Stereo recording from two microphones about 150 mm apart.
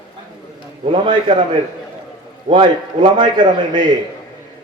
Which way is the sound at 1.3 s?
30° right (ahead or behind).